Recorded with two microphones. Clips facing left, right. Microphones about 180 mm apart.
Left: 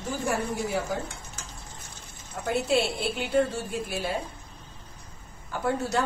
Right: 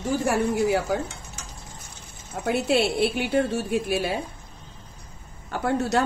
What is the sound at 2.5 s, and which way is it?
Speech, 70° right (ahead or behind).